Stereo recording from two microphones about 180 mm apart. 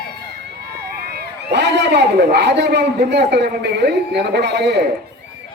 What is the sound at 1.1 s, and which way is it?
A man's voice, 65° right (ahead or behind).